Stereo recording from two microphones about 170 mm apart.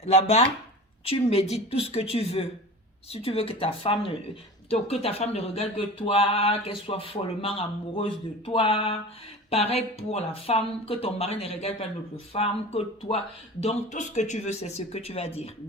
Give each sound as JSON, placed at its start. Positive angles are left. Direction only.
{"t": 0.0, "sound": "speech", "side_deg": 35}